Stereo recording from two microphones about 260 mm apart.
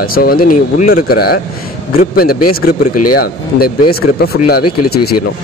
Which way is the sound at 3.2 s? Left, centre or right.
Left.